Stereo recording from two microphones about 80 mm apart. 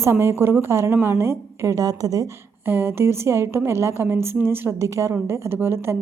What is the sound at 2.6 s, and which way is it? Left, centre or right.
A woman's voice, right.